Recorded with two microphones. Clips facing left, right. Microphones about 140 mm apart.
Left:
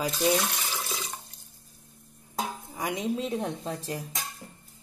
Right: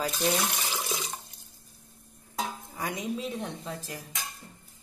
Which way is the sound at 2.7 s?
20° left (ahead or behind).